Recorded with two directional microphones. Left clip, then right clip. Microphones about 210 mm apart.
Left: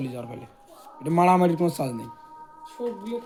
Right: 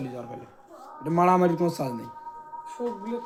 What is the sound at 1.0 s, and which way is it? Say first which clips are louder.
A man's voice: left 1 dB; 40° left (ahead or behind).